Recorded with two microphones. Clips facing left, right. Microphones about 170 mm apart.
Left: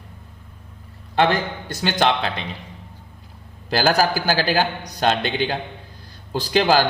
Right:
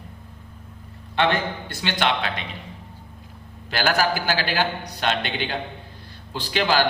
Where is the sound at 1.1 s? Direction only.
40° left (ahead or behind).